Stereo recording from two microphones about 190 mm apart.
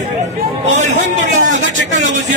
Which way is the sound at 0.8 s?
40° right (ahead or behind).